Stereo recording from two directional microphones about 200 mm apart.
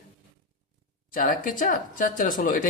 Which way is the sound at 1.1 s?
40° left (ahead or behind).